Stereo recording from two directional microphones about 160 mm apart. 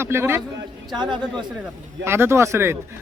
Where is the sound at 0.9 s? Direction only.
30° right (ahead or behind).